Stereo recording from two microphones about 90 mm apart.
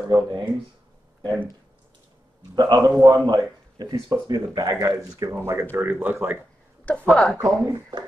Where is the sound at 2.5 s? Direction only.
50° right (ahead or behind).